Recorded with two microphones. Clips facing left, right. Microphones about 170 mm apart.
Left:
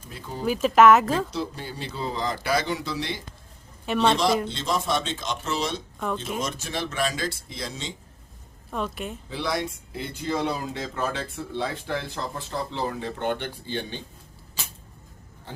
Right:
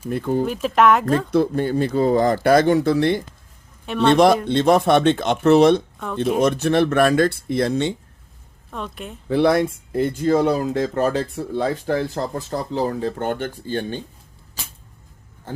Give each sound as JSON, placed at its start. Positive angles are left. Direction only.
{"t": 0.1, "sound": "speech", "side_deg": -55}
{"t": 0.4, "sound": "speech", "side_deg": 0}
{"t": 1.3, "sound": "speech", "side_deg": -55}
{"t": 3.8, "sound": "speech", "side_deg": 0}
{"t": 4.1, "sound": "speech", "side_deg": -55}
{"t": 8.7, "sound": "speech", "side_deg": 0}
{"t": 9.3, "sound": "speech", "side_deg": -55}